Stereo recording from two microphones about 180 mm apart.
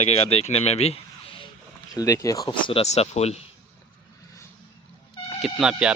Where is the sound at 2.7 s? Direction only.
35° left (ahead or behind).